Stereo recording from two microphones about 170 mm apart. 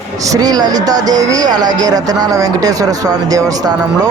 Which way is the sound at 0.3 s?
20° right (ahead or behind).